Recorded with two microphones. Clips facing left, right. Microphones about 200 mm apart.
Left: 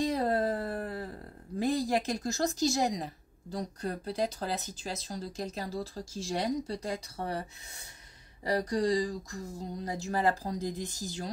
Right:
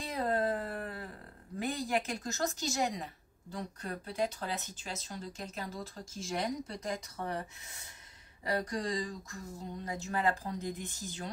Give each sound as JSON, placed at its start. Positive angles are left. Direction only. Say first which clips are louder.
{"t": 0.0, "sound": "a sound", "louder": "left 4 dB", "side_deg": 35}
{"t": 3.5, "sound": "speech", "louder": "left 5 dB", "side_deg": 35}
{"t": 8.5, "sound": "speech", "louder": "left 6 dB", "side_deg": 35}